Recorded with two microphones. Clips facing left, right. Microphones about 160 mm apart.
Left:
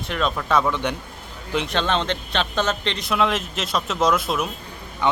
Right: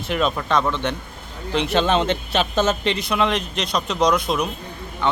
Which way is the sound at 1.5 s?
5° right (ahead or behind).